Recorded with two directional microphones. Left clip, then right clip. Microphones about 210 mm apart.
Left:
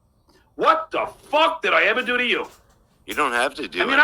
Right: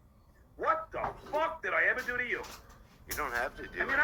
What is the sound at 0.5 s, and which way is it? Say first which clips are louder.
Speech: left 13 dB; 40° left (ahead or behind).